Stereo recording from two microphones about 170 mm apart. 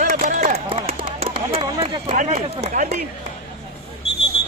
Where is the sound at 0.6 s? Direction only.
30° right (ahead or behind).